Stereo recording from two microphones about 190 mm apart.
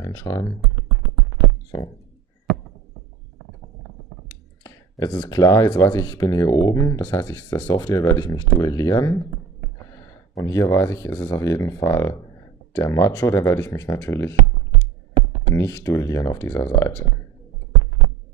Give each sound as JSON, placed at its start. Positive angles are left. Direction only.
{"t": 0.0, "sound": "speech", "side_deg": 15}
{"t": 4.6, "sound": "speech", "side_deg": 20}
{"t": 15.5, "sound": "speech", "side_deg": 15}